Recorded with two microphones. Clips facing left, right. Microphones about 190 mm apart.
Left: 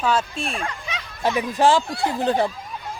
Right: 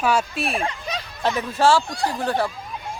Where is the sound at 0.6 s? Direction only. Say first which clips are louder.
Right 3 dB; 35° right (ahead or behind).